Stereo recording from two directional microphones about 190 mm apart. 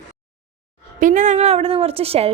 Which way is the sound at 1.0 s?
40° right (ahead or behind).